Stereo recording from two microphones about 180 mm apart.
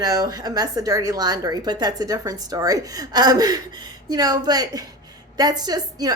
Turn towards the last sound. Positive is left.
turn(degrees=-20)  # may be behind; listen again after turning